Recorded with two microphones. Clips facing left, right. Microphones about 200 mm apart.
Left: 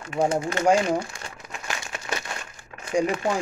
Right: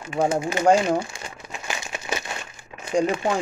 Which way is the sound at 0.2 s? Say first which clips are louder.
Right 1 dB; 5° right (ahead or behind).